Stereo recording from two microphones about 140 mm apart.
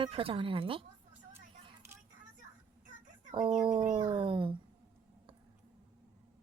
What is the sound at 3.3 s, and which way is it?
Speech, 35° right (ahead or behind).